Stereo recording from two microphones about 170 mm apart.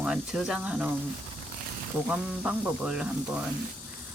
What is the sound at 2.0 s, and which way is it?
Speech, 5° right (ahead or behind).